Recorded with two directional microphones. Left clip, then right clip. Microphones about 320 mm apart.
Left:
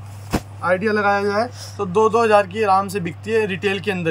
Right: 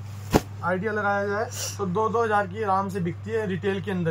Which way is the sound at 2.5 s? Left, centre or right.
Left.